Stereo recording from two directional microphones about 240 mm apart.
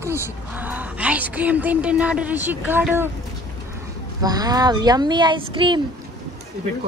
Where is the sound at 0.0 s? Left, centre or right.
Centre.